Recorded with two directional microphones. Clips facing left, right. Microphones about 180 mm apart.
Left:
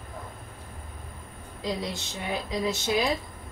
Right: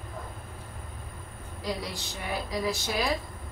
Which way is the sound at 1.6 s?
25° left (ahead or behind).